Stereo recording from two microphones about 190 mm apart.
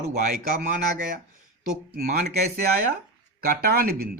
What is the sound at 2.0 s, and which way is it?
Speech, 50° right (ahead or behind).